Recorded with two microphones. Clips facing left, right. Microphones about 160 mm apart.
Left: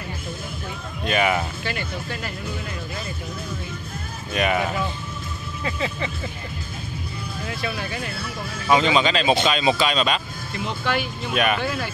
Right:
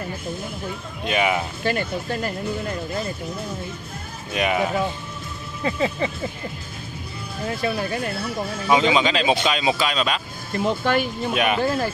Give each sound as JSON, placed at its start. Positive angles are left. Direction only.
{"t": 1.0, "sound": "speech", "side_deg": -10}
{"t": 1.6, "sound": "speech", "side_deg": -45}
{"t": 4.3, "sound": "speech", "side_deg": -10}
{"t": 5.6, "sound": "speech", "side_deg": -35}
{"t": 7.4, "sound": "speech", "side_deg": -40}
{"t": 8.6, "sound": "speech", "side_deg": -15}
{"t": 10.5, "sound": "speech", "side_deg": -45}
{"t": 11.3, "sound": "speech", "side_deg": -15}
{"t": 11.6, "sound": "speech", "side_deg": -40}